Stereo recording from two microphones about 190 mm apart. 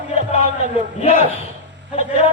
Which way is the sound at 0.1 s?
35° left (ahead or behind).